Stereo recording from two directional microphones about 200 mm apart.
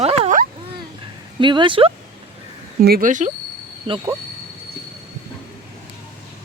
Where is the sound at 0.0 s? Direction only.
30° right (ahead or behind).